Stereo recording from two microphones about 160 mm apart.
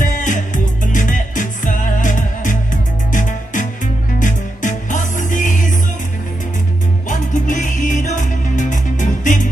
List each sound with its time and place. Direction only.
0.0 s music: 50° left (ahead or behind)
7.1 s music: 55° left (ahead or behind)